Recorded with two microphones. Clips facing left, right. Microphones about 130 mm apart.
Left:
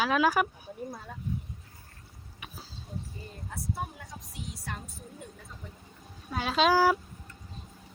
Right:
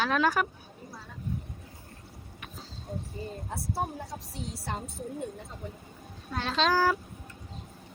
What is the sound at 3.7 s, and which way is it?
A woman's voice, 30° right (ahead or behind).